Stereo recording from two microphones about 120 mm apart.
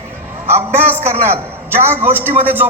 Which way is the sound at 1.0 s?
20° right (ahead or behind).